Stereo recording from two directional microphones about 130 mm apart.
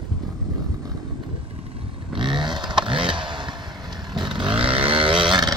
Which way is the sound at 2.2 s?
35° right (ahead or behind).